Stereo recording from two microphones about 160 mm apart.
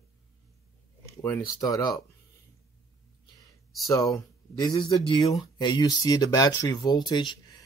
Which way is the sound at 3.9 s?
20° left (ahead or behind).